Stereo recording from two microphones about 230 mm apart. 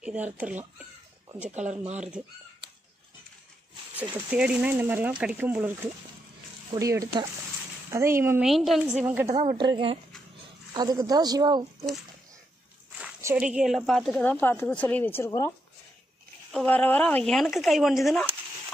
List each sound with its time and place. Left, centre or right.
0.0 s speech: centre
1.5 s speech: right
2.0 s speech: centre
4.0 s speech: centre
6.7 s a woman's voice: centre
13.0 s speech: centre
16.5 s speech: centre